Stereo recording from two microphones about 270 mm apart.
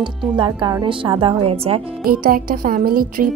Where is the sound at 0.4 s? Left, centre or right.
Centre.